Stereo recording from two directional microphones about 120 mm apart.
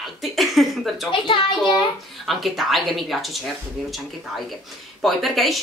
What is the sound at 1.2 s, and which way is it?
Speech, 45° left (ahead or behind).